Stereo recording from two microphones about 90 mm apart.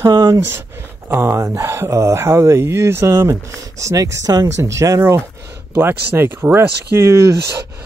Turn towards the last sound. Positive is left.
turn(degrees=-35)  # may be behind; listen again after turning